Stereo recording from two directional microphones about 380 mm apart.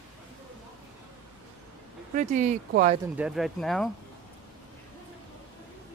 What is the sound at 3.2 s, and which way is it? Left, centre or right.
Speech, centre.